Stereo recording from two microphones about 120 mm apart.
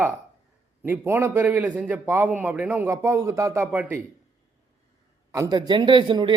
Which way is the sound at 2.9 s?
25° right (ahead or behind).